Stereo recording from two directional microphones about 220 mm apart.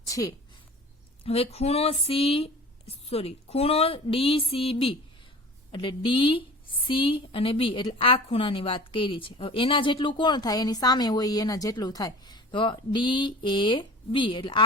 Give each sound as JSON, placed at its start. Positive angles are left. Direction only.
{"t": 0.1, "sound": "speech", "side_deg": 15}
{"t": 1.2, "sound": "a woman's voice", "side_deg": 25}